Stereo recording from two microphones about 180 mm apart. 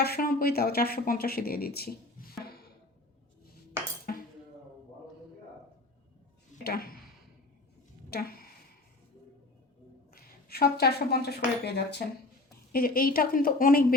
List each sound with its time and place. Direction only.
0.0 s speech: 55° left (ahead or behind)
6.7 s speech: 55° left (ahead or behind)
8.1 s a sound: 55° left (ahead or behind)
10.1 s speech: 55° left (ahead or behind)
12.7 s a woman's voice: 55° left (ahead or behind)